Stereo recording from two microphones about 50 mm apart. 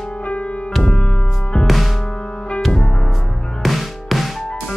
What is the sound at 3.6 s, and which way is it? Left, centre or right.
Music, centre.